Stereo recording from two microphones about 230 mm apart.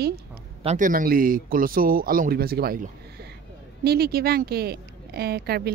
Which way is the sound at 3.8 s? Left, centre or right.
Right.